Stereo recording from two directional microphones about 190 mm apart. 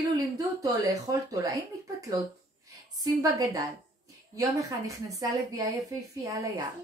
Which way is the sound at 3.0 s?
20° right (ahead or behind).